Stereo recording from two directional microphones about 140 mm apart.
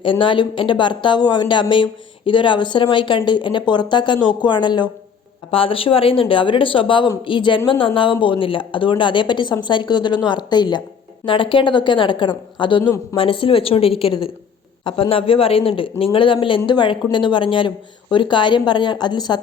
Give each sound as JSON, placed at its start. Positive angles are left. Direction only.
{"t": 0.0, "sound": "speech", "side_deg": 35}